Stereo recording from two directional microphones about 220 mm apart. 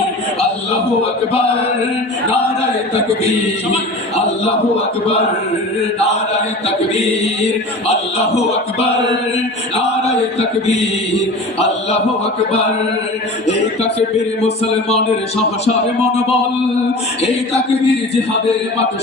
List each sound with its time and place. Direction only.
8.4 s a man's voice: 30° left (ahead or behind)
14.4 s a man's voice: 25° left (ahead or behind)
17.8 s a man's voice: 30° left (ahead or behind)